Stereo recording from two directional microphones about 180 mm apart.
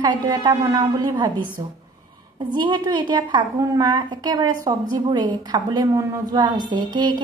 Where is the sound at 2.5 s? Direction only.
25° right (ahead or behind).